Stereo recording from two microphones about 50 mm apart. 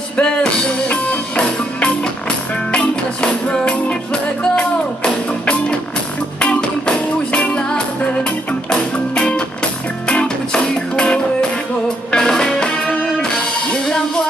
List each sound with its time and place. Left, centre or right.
0.2 s music: centre